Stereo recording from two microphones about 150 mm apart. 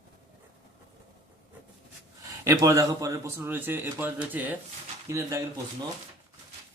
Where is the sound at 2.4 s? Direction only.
20° right (ahead or behind).